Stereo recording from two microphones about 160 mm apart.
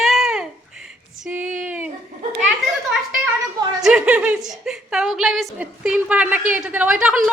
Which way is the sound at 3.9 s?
5° right (ahead or behind).